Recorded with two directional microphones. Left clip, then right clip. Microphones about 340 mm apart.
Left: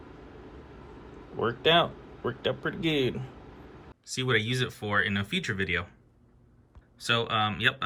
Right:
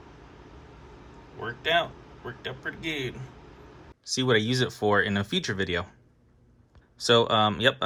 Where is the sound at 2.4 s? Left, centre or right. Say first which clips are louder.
Left 3 dB; centre.